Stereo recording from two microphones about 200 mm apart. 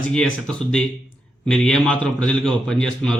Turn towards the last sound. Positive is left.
turn(degrees=5)  # may be behind; listen again after turning